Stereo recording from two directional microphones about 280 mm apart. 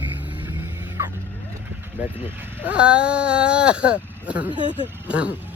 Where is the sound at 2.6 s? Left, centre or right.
Centre.